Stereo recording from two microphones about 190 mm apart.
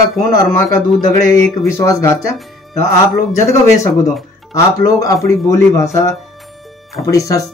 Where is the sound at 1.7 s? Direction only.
15° left (ahead or behind).